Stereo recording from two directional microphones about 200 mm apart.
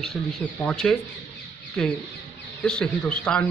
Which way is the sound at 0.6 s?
5° left (ahead or behind).